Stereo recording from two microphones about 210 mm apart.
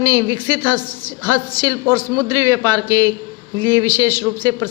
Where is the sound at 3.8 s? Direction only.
10° left (ahead or behind).